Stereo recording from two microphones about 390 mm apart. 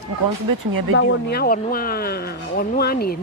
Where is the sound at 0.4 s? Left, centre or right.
Right.